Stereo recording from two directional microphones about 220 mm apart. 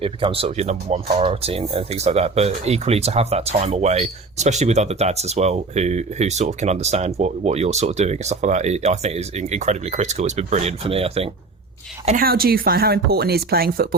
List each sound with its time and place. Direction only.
0.0 s speech: 25° right (ahead or behind)
12.0 s speech: 40° right (ahead or behind)